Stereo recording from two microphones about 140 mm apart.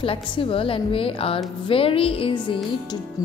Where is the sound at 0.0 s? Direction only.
40° left (ahead or behind).